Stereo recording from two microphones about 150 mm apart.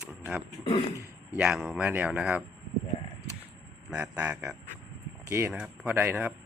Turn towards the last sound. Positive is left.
turn(degrees=-15)  # may be behind; listen again after turning